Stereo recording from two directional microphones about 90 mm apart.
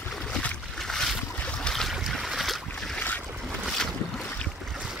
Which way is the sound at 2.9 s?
20° left (ahead or behind).